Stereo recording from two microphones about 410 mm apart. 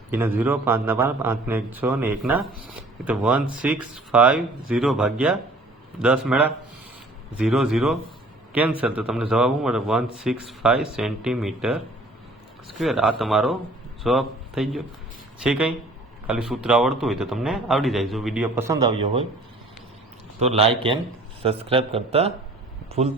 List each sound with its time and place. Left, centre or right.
0.1 s a man's voice: centre
12.8 s a man's voice: centre
20.4 s a man's voice: centre